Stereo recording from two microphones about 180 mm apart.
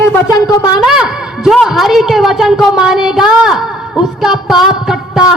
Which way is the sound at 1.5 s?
Centre (ahead or behind).